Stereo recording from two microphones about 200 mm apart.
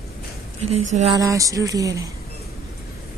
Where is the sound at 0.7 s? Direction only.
35° right (ahead or behind).